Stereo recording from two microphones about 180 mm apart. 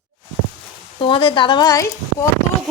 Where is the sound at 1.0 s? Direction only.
25° left (ahead or behind).